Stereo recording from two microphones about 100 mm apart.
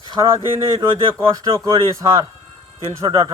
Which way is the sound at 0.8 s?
35° right (ahead or behind).